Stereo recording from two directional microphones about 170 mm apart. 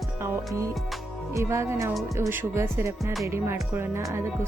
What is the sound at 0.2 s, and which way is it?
Music, 20° right (ahead or behind).